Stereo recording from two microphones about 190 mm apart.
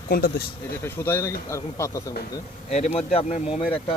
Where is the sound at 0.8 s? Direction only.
10° left (ahead or behind).